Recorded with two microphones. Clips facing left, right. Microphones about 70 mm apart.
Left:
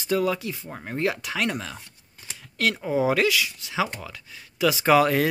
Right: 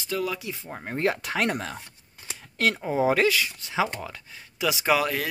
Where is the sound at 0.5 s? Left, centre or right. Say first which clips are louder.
Even; right.